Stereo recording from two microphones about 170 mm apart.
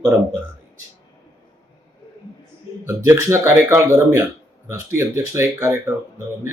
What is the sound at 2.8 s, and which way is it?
Speech, 15° right (ahead or behind).